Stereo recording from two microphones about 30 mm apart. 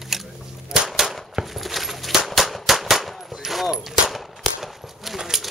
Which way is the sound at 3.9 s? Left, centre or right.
Centre.